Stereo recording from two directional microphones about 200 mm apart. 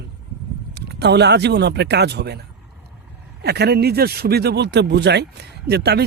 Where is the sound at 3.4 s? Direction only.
55° right (ahead or behind).